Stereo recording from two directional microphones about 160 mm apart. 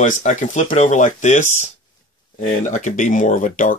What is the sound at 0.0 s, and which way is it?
Speech, 50° left (ahead or behind).